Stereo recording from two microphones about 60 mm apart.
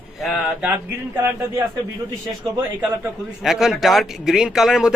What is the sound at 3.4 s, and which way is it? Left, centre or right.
A man's voice, centre.